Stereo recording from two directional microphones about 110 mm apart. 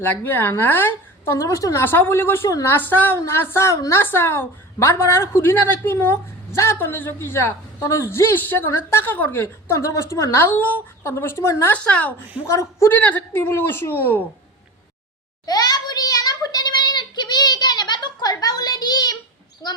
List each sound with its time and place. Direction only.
0.0 s a woman's voice: 20° left (ahead or behind)
1.8 s a woman's voice: 20° left (ahead or behind)
11.7 s a woman's voice: 10° left (ahead or behind)
12.5 s a woman's voice: 25° left (ahead or behind)
15.4 s child singing: 35° left (ahead or behind)
19.6 s a woman's voice: 40° left (ahead or behind)